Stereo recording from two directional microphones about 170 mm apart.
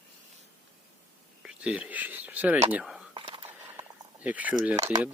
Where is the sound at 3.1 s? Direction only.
30° right (ahead or behind).